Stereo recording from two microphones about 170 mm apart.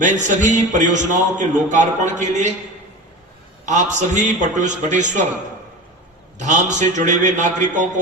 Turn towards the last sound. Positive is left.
turn(degrees=-45)  # may be behind; listen again after turning